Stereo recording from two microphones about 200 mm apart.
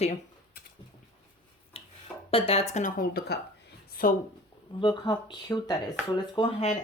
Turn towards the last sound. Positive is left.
turn(degrees=25)  # may be behind; listen again after turning